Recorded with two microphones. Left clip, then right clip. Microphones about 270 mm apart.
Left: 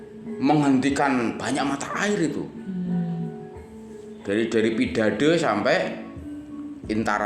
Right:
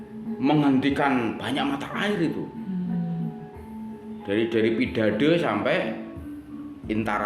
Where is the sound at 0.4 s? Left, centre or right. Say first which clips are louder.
Left 1 dB; left.